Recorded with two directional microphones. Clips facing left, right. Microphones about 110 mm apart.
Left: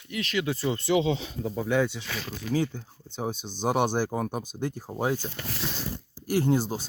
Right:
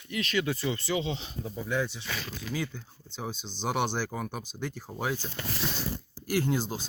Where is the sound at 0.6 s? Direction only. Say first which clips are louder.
Left 4 dB; 50° left (ahead or behind).